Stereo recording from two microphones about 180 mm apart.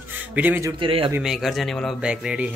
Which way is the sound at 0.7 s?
30° right (ahead or behind).